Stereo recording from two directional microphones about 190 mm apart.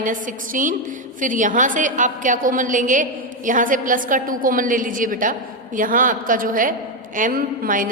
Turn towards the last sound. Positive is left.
turn(degrees=-45)  # may be behind; listen again after turning